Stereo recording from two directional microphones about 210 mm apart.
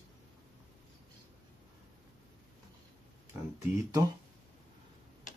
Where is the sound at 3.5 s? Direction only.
15° right (ahead or behind).